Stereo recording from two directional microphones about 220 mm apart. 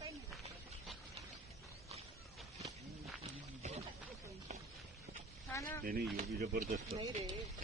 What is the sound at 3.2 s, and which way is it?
Wild animals, 30° right (ahead or behind).